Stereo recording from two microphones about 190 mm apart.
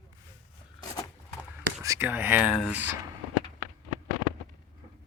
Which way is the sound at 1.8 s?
15° right (ahead or behind).